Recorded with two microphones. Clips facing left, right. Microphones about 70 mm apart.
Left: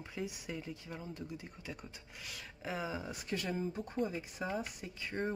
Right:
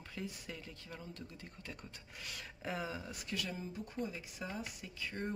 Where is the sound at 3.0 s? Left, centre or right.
Left.